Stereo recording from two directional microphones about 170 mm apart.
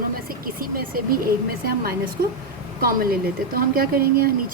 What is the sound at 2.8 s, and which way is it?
A woman's voice, 60° right (ahead or behind).